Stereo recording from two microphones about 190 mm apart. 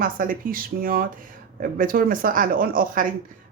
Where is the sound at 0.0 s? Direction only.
45° right (ahead or behind).